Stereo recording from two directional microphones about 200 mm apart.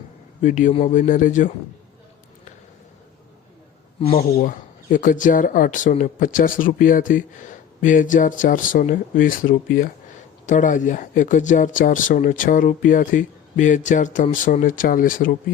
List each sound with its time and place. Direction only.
0.4 s speech: 40° left (ahead or behind)
4.2 s speech: 40° left (ahead or behind)